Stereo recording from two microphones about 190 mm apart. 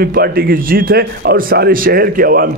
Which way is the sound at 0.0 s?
55° right (ahead or behind).